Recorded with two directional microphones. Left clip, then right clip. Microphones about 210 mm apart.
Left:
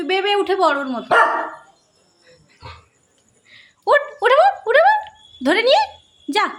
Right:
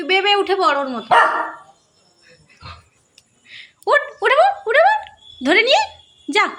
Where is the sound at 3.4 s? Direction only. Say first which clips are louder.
Left 1 dB; centre (ahead or behind).